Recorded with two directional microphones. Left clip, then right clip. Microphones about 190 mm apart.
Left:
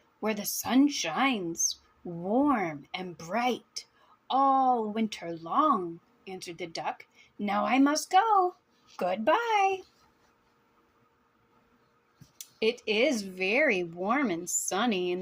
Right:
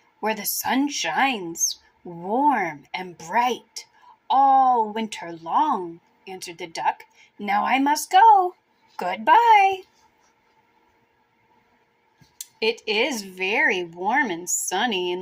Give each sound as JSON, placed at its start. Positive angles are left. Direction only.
{"t": 0.2, "sound": "speech", "side_deg": 25}
{"t": 12.6, "sound": "a woman's voice", "side_deg": 25}